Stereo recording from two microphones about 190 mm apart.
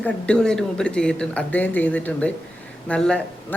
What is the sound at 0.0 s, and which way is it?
Speech, 5° left (ahead or behind).